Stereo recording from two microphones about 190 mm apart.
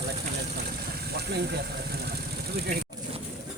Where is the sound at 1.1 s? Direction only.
60° right (ahead or behind).